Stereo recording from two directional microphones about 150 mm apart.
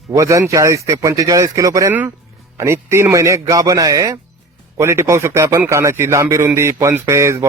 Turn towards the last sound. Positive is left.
turn(degrees=-20)  # may be behind; listen again after turning